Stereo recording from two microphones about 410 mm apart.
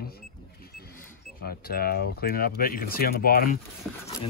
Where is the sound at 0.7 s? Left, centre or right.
Left.